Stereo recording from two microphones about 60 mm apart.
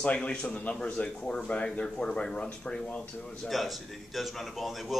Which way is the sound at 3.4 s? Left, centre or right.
Centre.